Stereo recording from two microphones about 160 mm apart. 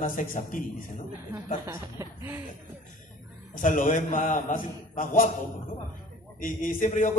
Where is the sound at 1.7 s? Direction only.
15° right (ahead or behind).